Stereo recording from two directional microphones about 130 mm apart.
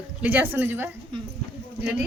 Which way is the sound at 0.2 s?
15° right (ahead or behind).